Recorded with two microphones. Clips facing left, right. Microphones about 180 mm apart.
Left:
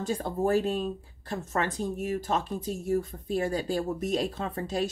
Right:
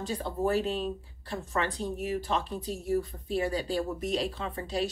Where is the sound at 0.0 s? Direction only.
45° left (ahead or behind).